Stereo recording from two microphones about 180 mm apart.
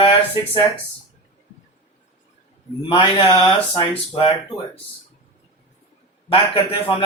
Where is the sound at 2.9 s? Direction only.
25° left (ahead or behind).